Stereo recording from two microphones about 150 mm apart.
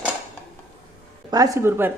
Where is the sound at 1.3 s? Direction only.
20° right (ahead or behind).